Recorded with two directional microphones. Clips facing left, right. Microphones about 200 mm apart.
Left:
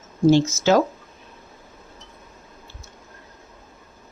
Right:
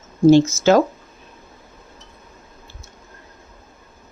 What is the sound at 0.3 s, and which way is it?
Speech, 55° right (ahead or behind).